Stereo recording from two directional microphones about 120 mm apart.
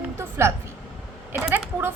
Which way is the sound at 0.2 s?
20° right (ahead or behind).